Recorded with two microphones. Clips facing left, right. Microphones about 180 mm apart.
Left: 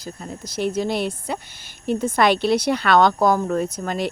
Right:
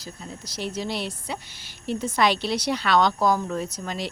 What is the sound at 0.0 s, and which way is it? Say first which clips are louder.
Speech: left 5 dB; 55° left (ahead or behind).